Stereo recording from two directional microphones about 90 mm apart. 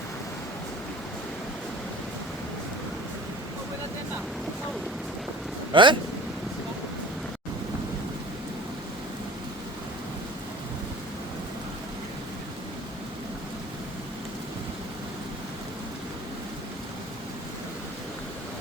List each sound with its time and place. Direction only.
5.7 s speech: 65° right (ahead or behind)